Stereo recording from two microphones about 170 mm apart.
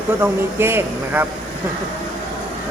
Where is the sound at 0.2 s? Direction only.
15° right (ahead or behind).